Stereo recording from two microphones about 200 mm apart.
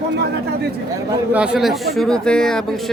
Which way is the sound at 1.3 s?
5° right (ahead or behind).